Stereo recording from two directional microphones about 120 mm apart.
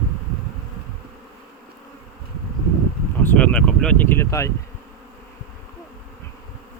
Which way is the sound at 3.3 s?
10° left (ahead or behind).